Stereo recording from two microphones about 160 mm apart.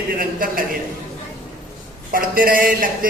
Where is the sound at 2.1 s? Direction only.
65° right (ahead or behind).